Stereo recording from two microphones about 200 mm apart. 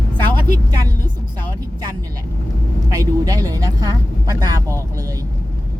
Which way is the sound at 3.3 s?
20° right (ahead or behind).